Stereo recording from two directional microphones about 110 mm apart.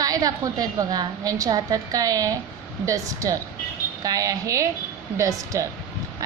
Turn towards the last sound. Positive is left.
turn(degrees=-30)  # may be behind; listen again after turning